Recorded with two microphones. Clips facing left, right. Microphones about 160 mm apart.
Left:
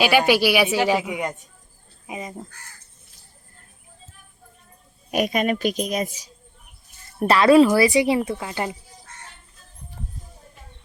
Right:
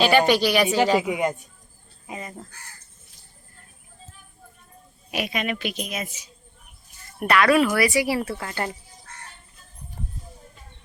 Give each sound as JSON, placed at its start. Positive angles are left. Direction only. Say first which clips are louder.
{"t": 0.0, "sound": "speech", "louder": "even", "side_deg": 5}
{"t": 2.0, "sound": "speech", "louder": "left 3 dB", "side_deg": 15}
{"t": 5.1, "sound": "speech", "louder": "left 6 dB", "side_deg": 45}
{"t": 7.2, "sound": "speech", "louder": "left 5 dB", "side_deg": 30}